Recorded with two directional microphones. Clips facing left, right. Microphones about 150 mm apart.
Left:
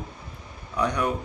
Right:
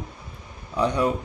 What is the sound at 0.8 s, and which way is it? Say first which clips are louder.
Speech: right 3 dB; 25° right (ahead or behind).